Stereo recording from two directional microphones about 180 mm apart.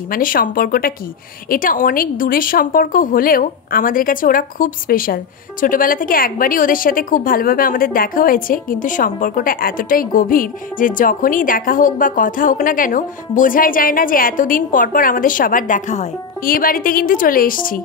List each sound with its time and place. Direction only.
0.1 s a woman's voice: 50° left (ahead or behind)